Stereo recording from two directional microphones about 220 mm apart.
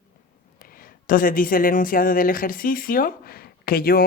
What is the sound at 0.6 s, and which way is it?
Speech, 40° left (ahead or behind).